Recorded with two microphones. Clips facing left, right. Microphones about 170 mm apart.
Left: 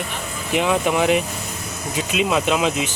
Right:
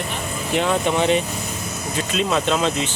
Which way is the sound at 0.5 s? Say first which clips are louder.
Left 1 dB; 5° left (ahead or behind).